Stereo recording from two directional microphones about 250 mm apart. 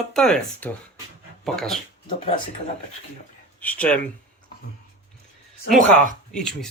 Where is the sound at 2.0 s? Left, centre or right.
Centre.